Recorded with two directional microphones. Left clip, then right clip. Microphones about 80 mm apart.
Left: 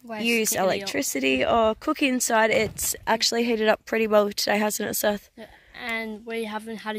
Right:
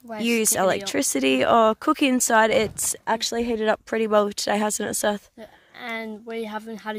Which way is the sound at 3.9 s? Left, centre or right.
Centre.